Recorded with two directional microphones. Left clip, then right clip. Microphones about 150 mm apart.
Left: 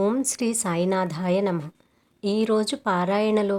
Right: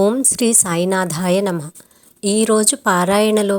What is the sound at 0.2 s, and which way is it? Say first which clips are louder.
Speech: right 9 dB; 35° right (ahead or behind).